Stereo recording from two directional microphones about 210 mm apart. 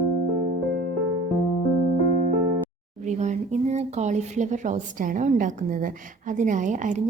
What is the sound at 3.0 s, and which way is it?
A woman's voice, 35° right (ahead or behind).